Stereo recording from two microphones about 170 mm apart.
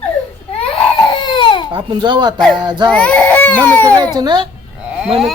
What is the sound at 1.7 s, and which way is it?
Speech, 30° right (ahead or behind).